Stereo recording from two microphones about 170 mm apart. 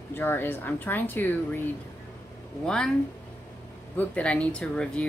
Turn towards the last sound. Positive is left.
turn(degrees=5)  # may be behind; listen again after turning